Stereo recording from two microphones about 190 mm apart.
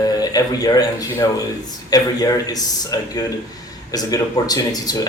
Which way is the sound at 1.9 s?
20° left (ahead or behind).